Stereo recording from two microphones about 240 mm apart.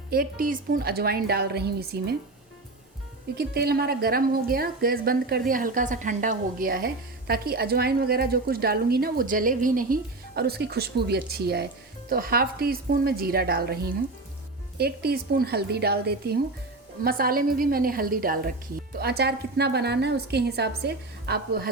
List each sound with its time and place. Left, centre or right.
0.1 s a woman's voice: right
3.3 s a woman's voice: right